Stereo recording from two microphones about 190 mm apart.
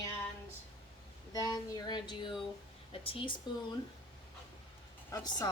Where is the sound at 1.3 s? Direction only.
20° left (ahead or behind).